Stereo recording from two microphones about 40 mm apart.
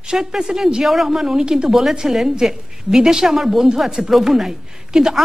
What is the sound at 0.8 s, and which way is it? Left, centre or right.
Speech, centre.